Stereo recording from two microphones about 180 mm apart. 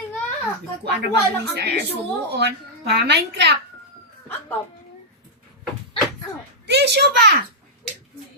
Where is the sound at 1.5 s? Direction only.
65° right (ahead or behind).